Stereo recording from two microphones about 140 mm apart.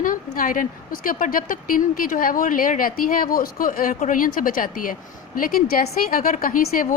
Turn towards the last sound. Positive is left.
turn(degrees=80)